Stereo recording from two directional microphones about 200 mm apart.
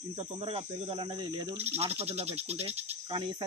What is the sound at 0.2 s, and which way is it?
Cricket, 30° right (ahead or behind).